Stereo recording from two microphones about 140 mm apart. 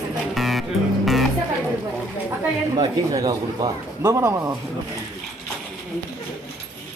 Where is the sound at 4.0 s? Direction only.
25° right (ahead or behind).